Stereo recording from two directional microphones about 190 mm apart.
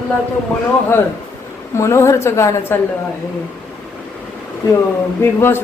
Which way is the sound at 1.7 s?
15° left (ahead or behind).